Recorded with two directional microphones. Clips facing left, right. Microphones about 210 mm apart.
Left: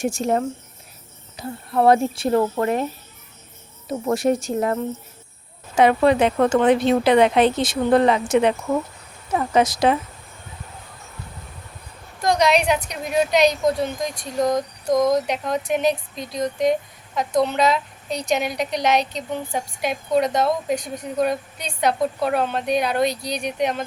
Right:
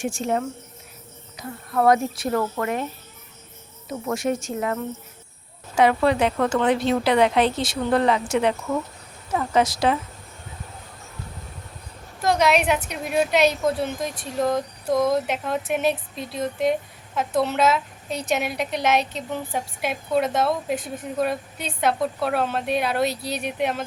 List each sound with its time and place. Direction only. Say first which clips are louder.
0.0 s speech: left 3 dB; 40° left (ahead or behind)
1.4 s a woman's voice: left 3 dB; 30° left (ahead or behind)
3.8 s speech: left 5 dB; 35° left (ahead or behind)
5.7 s a woman's voice: left 3 dB; 20° left (ahead or behind)
12.2 s a woman's voice: left 1 dB; 5° right (ahead or behind)